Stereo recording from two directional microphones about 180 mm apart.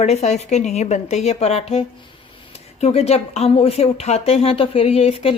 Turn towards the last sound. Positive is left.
turn(degrees=35)  # may be behind; listen again after turning